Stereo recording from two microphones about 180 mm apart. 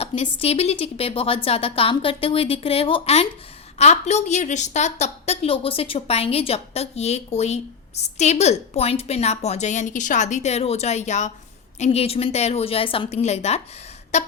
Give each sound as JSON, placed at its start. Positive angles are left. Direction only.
{"t": 0.0, "sound": "a woman's voice", "side_deg": 35}